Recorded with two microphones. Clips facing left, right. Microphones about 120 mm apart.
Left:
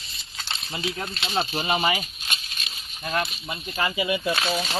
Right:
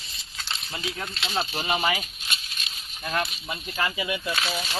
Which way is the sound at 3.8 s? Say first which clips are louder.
Left 3 dB; 20° left (ahead or behind).